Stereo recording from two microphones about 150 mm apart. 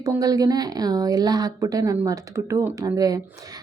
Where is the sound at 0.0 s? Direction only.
25° right (ahead or behind).